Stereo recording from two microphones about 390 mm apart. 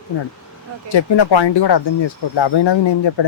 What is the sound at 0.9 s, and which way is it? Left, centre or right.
Speech, left.